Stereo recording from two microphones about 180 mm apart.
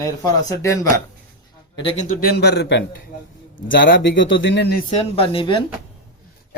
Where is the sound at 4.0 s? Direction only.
80° left.